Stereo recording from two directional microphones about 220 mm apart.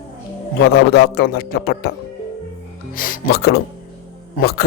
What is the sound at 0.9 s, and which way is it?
Speech, 45° left (ahead or behind).